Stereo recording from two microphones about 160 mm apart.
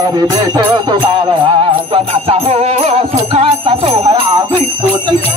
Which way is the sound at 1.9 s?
35° right (ahead or behind).